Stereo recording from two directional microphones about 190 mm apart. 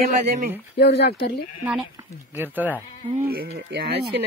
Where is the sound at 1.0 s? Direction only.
60° left (ahead or behind).